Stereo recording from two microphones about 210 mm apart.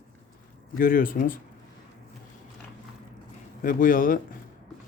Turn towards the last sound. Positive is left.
turn(degrees=40)  # may be behind; listen again after turning